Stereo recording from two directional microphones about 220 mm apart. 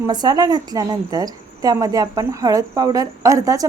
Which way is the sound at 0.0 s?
20° right (ahead or behind).